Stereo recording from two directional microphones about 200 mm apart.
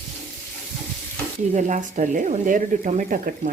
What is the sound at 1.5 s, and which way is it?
Speech, 35° right (ahead or behind).